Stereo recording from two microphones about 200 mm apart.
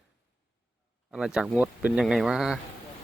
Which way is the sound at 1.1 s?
5° right (ahead or behind).